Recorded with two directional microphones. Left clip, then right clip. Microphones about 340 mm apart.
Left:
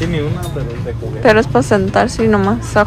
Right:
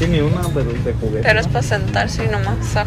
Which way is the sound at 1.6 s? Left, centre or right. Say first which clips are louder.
Left 7 dB; left.